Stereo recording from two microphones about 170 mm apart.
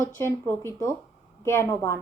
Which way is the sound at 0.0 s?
15° left (ahead or behind).